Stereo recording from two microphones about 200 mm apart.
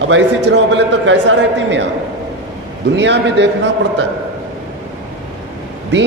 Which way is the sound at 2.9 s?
60° right (ahead or behind).